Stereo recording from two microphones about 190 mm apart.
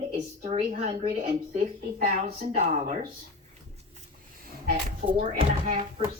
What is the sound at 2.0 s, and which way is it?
Speech, 40° right (ahead or behind).